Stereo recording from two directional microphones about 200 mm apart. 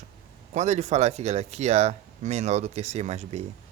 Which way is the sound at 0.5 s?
35° right (ahead or behind).